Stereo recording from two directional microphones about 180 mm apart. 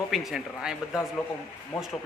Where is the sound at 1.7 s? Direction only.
30° left (ahead or behind).